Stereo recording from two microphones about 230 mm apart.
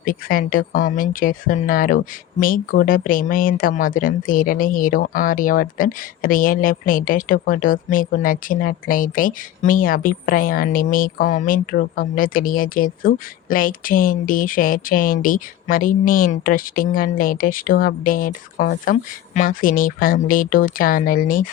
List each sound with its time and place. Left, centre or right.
0.0 s speech: left